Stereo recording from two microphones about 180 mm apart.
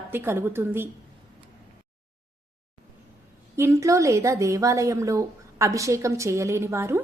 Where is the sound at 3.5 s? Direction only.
15° right (ahead or behind).